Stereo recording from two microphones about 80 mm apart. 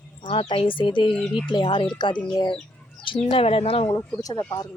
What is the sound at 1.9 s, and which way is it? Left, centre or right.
Speech, left.